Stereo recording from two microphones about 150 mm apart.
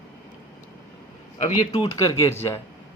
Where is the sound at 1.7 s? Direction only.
25° left (ahead or behind).